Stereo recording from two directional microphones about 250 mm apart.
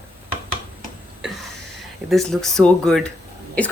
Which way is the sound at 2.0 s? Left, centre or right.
Centre.